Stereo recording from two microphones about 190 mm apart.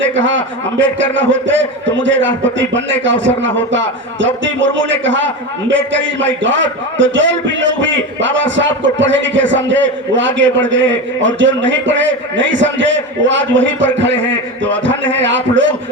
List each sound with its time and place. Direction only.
0.0 s speech: 80° right